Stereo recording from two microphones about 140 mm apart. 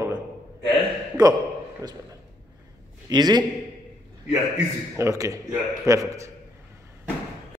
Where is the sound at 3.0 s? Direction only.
30° right (ahead or behind).